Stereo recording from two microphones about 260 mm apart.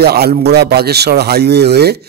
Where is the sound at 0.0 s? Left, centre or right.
Right.